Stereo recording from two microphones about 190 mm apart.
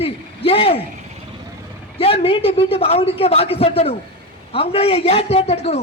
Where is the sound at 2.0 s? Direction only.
30° left (ahead or behind).